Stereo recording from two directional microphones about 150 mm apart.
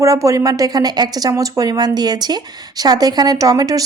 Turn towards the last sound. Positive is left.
turn(degrees=-25)  # may be behind; listen again after turning